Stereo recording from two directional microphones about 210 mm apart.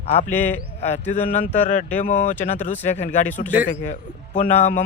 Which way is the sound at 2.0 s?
40° left (ahead or behind).